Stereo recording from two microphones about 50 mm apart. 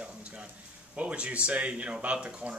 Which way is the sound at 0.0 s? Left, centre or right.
Right.